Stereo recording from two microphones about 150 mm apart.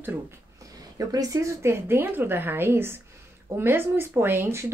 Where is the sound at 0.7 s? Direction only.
25° right (ahead or behind).